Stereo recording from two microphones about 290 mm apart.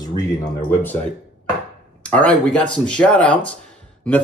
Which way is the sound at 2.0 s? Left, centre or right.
Centre.